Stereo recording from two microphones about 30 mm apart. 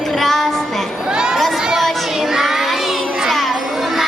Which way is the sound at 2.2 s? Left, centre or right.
Centre.